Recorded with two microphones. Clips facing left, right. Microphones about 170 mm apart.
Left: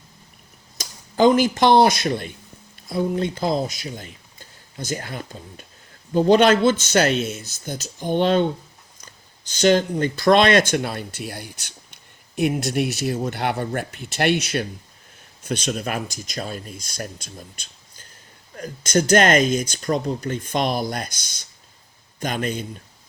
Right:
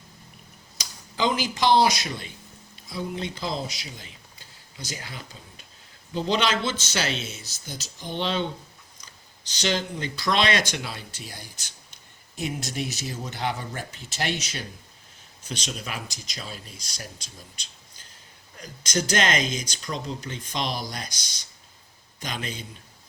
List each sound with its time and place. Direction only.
0.8 s speech: 50° left (ahead or behind)